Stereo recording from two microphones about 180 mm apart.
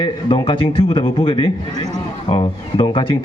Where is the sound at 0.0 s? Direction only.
30° left (ahead or behind).